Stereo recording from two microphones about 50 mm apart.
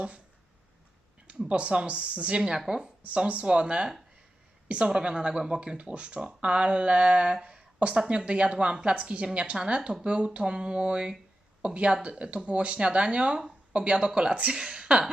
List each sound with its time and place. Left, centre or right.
1.5 s speech: right
3.0 s speech: right
4.9 s speech: centre